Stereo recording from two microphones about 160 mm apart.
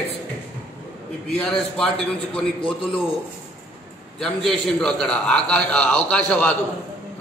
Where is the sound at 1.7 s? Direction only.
5° left (ahead or behind).